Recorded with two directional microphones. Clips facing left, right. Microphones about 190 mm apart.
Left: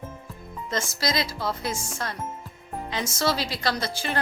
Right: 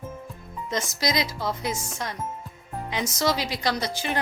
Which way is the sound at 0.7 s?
15° right (ahead or behind).